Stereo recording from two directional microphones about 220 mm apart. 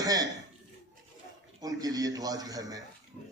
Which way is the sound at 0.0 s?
15° right (ahead or behind).